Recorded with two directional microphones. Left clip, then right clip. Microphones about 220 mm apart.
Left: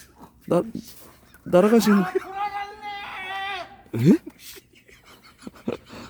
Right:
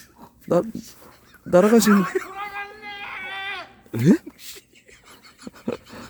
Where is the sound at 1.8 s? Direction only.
30° right (ahead or behind).